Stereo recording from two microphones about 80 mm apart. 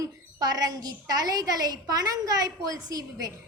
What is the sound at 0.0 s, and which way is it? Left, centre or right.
A woman's voice, right.